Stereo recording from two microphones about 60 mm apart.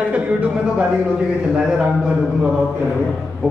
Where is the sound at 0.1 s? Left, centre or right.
Right.